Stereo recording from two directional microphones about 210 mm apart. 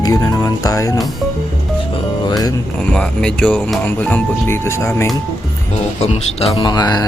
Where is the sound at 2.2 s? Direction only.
20° left (ahead or behind).